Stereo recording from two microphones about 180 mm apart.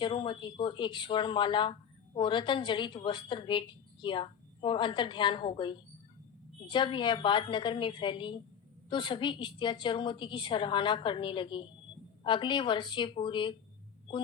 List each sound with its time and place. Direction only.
0.0 s a woman's voice: 25° left (ahead or behind)